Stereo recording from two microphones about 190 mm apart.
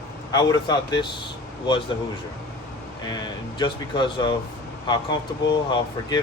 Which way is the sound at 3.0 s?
20° left (ahead or behind).